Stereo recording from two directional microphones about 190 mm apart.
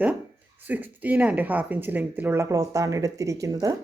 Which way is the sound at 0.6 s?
10° right (ahead or behind).